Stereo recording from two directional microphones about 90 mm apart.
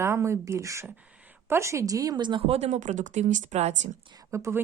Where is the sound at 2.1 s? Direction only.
60° right (ahead or behind); by 2.5 s 75° right (ahead or behind).